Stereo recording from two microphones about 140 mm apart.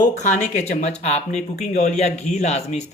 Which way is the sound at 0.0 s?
60° left (ahead or behind).